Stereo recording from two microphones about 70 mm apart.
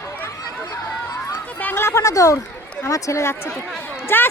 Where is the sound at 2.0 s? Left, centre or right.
Left.